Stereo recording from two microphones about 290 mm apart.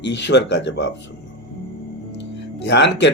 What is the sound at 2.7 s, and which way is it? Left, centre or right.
Speech, left.